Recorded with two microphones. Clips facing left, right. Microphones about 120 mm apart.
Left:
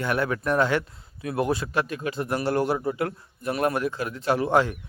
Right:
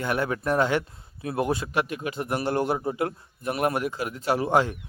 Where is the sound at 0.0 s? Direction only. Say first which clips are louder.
Left 1 dB; 25° right (ahead or behind).